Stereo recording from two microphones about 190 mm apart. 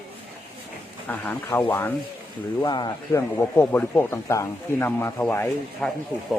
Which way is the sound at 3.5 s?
10° left (ahead or behind).